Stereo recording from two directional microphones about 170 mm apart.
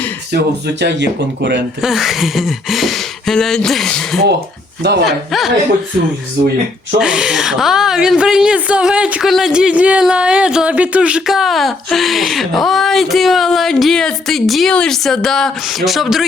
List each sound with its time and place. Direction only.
0.8 s speech: 90° right
1.8 s speech: centre (ahead or behind)
4.8 s speech: 80° right
5.0 s speech: centre (ahead or behind)
7.0 s speech: 5° right (ahead or behind)